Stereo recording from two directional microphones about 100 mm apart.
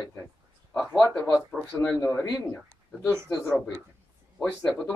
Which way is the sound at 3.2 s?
5° left (ahead or behind).